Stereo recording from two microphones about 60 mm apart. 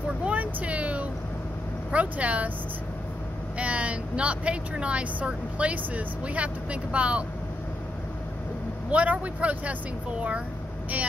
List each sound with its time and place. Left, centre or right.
0.2 s a sound: right
1.9 s speech: right
3.5 s speech: right
8.9 s speech: right